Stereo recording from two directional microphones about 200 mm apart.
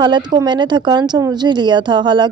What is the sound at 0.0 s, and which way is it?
Speech, 20° right (ahead or behind).